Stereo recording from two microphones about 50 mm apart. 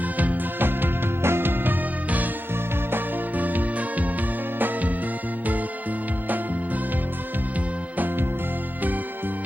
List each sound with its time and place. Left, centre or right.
0.2 s music: right
2.9 s music: right